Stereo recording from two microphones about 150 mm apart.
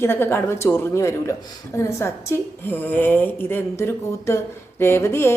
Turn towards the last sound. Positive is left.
turn(degrees=15)  # may be behind; listen again after turning